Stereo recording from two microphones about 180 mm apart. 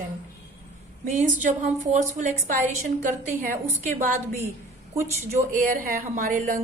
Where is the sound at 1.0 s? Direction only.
45° right (ahead or behind).